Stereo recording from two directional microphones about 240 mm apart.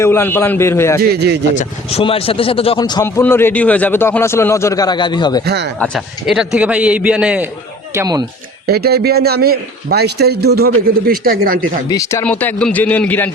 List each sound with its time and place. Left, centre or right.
0.0 s a man's voice: centre
1.1 s speech: right
1.5 s a man's voice: left
5.5 s speech: right
5.8 s a man's voice: centre
7.9 s speech: centre
8.6 s a man's voice: right
11.9 s a man's voice: centre